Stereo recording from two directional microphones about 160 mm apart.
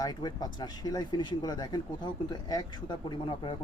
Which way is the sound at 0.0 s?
25° left (ahead or behind).